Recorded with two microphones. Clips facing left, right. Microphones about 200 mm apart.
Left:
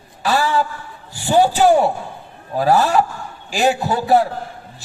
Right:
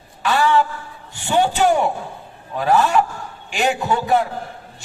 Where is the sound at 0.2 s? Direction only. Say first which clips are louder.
Right 1 dB; 35° left (ahead or behind).